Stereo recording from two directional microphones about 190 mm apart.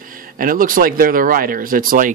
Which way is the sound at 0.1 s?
45° right (ahead or behind).